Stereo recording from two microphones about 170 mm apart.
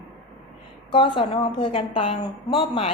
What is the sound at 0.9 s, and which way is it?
A woman's voice, 30° left (ahead or behind).